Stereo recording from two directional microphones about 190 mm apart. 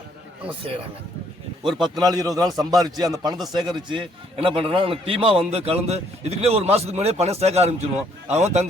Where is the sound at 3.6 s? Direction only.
25° right (ahead or behind).